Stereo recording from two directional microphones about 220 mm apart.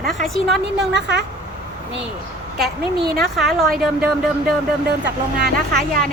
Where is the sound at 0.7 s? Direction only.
50° right (ahead or behind).